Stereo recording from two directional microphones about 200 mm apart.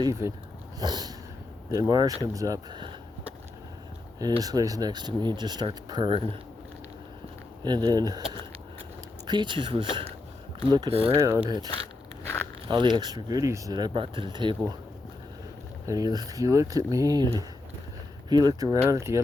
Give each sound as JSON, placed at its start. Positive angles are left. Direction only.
{"t": 0.0, "sound": "speech", "side_deg": -15}
{"t": 4.4, "sound": "speech", "side_deg": -20}
{"t": 7.6, "sound": "speech", "side_deg": -20}
{"t": 11.2, "sound": "speech", "side_deg": -15}
{"t": 15.9, "sound": "speech", "side_deg": -20}
{"t": 18.3, "sound": "speech", "side_deg": -20}